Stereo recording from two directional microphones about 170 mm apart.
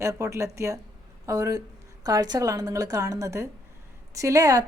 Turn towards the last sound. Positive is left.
turn(degrees=-20)  # may be behind; listen again after turning